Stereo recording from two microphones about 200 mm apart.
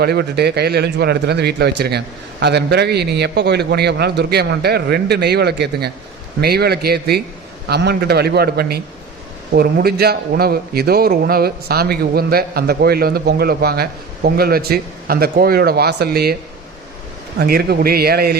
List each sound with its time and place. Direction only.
0.0 s a man's voice: 55° right (ahead or behind)
17.4 s a man's voice: 50° right (ahead or behind)